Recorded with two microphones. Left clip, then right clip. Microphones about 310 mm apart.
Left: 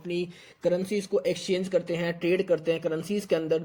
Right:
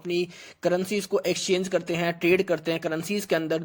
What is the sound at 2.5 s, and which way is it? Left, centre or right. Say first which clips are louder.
Speech: left 1 dB; right.